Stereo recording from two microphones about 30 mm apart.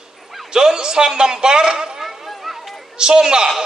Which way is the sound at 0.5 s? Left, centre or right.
Right.